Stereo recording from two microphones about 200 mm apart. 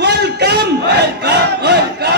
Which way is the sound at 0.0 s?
55° right (ahead or behind).